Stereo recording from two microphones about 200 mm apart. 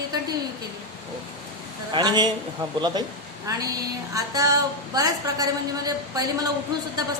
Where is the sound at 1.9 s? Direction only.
20° right (ahead or behind).